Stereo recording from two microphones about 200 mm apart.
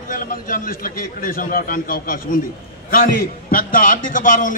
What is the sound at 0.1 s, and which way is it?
A man's voice, 45° left (ahead or behind).